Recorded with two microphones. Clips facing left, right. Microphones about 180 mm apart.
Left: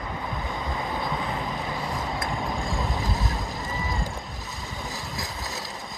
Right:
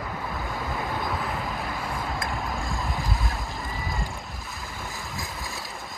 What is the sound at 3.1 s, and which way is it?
Boat, 40° left (ahead or behind).